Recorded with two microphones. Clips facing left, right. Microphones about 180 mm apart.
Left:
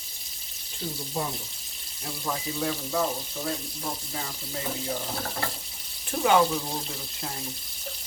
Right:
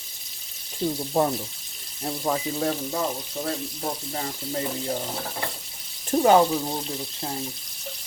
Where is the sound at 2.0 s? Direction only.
45° right (ahead or behind).